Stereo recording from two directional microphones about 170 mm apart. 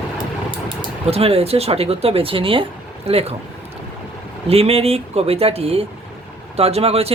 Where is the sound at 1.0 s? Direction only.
35° right (ahead or behind).